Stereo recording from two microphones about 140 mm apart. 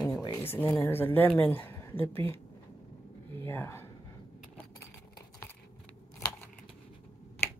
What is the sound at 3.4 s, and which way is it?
Speech, 20° left (ahead or behind).